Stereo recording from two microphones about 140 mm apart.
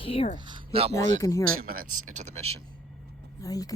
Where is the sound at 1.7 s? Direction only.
80° right; by 2.5 s 50° right (ahead or behind).